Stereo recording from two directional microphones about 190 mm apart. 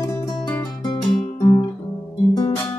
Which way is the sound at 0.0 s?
20° left (ahead or behind).